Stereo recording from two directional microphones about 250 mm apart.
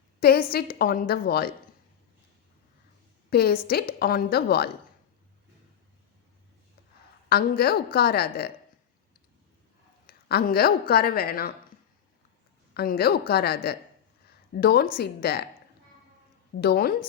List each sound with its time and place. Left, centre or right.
0.2 s a woman's voice: left
3.2 s a woman's voice: left
7.3 s a woman's voice: left
10.1 s a woman's voice: left
12.7 s a woman's voice: left
16.6 s a woman's voice: left